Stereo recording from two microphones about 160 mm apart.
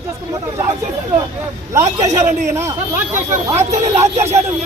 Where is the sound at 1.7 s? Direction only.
20° right (ahead or behind).